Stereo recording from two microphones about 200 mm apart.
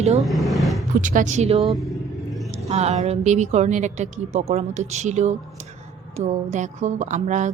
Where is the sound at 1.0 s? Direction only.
40° right (ahead or behind).